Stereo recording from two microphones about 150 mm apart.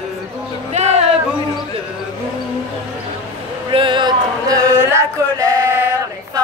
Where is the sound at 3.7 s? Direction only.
35° right (ahead or behind).